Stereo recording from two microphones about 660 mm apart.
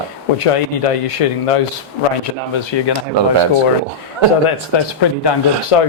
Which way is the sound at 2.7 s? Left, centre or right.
Left.